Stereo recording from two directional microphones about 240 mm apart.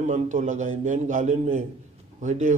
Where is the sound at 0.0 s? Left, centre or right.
Right.